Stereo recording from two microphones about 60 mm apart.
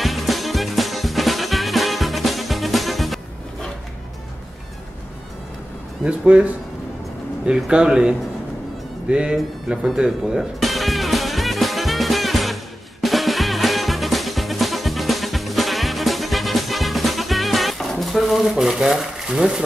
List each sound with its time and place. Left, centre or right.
0.0 s music: centre
6.0 s speech: right
10.6 s music: centre